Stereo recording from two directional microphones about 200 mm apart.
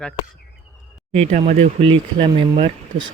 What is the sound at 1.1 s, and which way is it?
Speech, 35° right (ahead or behind).